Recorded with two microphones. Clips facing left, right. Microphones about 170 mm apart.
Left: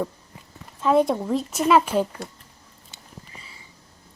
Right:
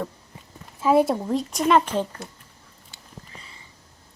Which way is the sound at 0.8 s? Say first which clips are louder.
Even; 10° right (ahead or behind).